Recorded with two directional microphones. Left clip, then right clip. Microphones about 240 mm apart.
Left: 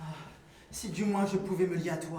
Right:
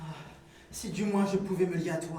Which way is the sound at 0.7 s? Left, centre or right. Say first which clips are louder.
Right 1 dB; left.